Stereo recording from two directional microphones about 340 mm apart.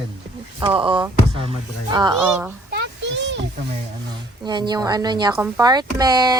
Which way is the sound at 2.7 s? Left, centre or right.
Right.